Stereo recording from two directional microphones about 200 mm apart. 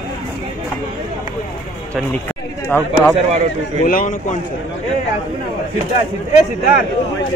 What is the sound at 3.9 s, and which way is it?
Speech, 40° left (ahead or behind).